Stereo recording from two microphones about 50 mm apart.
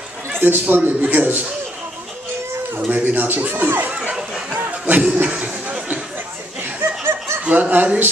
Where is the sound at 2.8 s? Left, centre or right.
Right.